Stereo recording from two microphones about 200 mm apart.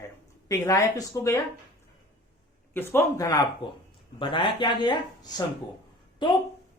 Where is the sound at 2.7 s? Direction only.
15° left (ahead or behind).